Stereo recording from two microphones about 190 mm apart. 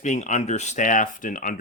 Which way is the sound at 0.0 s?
40° left (ahead or behind).